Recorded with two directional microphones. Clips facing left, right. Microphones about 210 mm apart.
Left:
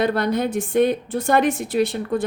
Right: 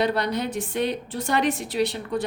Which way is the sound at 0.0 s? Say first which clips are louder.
Left 4 dB; 50° left (ahead or behind).